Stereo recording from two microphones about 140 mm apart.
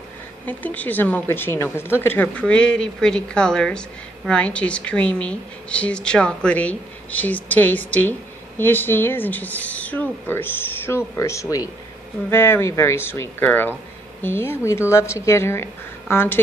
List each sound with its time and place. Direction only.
0.5 s speech: 10° left (ahead or behind)